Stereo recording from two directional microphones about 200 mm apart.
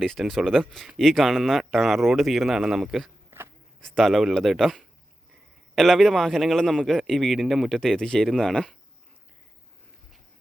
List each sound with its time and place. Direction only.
0.0 s speech: centre (ahead or behind)
3.2 s a sound: 10° right (ahead or behind)
3.8 s speech: centre (ahead or behind)